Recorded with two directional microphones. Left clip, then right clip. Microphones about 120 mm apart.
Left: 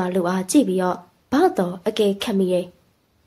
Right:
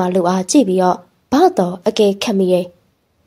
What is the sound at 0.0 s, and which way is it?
A woman's voice, 40° right (ahead or behind).